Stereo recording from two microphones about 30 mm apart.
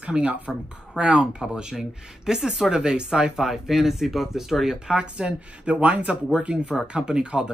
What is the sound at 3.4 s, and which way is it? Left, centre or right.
Speech, centre.